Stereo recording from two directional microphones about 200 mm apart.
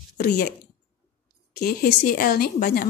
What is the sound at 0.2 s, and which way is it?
Speech, 45° left (ahead or behind).